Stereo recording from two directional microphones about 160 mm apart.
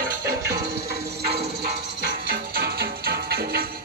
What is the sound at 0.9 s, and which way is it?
Music, 85° right.